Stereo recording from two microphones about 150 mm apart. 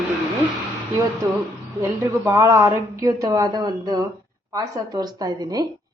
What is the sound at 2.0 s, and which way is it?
Speech, 20° right (ahead or behind).